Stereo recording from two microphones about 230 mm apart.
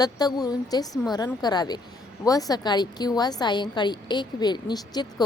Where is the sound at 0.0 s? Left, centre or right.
Centre.